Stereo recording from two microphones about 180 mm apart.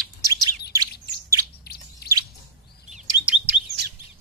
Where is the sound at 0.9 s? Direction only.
65° left (ahead or behind).